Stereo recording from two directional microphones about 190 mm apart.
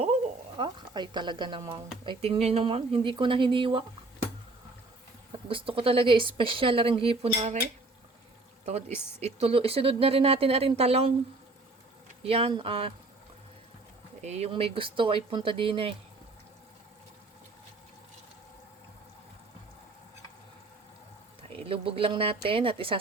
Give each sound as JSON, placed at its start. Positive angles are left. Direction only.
{"t": 0.5, "sound": "speech", "side_deg": -25}
{"t": 5.5, "sound": "speech", "side_deg": -30}
{"t": 9.2, "sound": "speech", "side_deg": -30}
{"t": 12.2, "sound": "speech", "side_deg": -30}
{"t": 14.2, "sound": "speech", "side_deg": -35}
{"t": 21.5, "sound": "speech", "side_deg": -30}